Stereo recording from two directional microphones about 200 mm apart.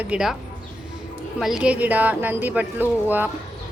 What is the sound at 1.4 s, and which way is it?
Speech, 5° right (ahead or behind).